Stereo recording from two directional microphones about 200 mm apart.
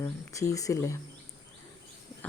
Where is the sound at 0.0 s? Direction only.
15° left (ahead or behind).